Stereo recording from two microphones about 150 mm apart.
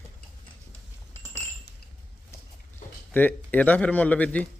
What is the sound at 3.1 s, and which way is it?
Speech, 10° left (ahead or behind).